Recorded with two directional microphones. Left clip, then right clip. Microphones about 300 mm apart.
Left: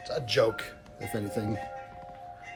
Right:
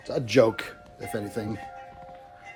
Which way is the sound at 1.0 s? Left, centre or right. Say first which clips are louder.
Right 1 dB; centre.